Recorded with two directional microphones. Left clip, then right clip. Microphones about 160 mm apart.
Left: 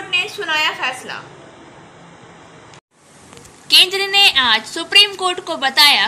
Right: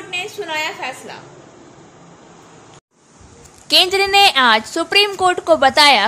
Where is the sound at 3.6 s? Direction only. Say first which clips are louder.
Left 1 dB; 50° right (ahead or behind).